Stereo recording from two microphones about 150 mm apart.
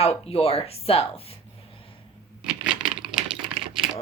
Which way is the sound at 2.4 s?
5° right (ahead or behind).